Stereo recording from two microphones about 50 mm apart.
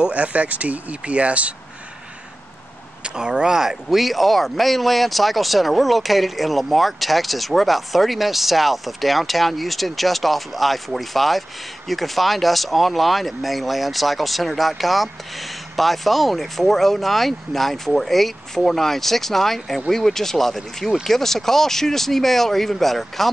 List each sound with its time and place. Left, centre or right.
0.0 s speech: right
3.0 s speech: right; by 23.3 s centre